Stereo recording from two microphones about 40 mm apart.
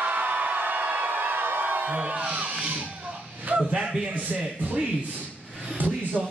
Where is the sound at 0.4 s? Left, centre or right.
Right.